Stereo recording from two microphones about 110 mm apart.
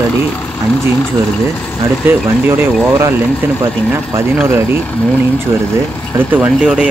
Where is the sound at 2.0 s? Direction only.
20° right (ahead or behind).